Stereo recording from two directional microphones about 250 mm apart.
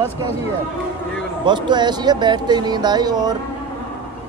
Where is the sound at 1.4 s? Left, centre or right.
Centre.